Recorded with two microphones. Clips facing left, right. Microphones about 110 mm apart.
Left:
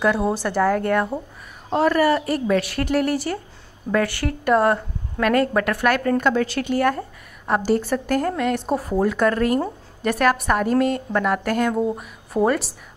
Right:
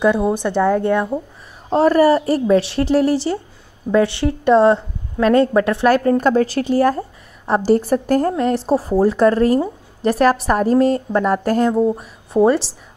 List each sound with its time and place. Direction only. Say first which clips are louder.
0.0 s a woman's voice: right 4 dB; 20° right (ahead or behind)
1.7 s a woman's voice: right 5 dB; 35° right (ahead or behind)